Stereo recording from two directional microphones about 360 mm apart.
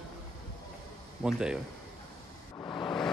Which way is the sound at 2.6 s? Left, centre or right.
Centre.